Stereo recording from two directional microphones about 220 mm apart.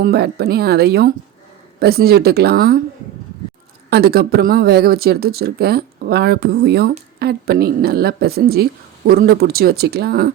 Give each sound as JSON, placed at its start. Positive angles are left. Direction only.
{"t": 0.0, "sound": "speech", "side_deg": -45}
{"t": 3.8, "sound": "speech", "side_deg": -45}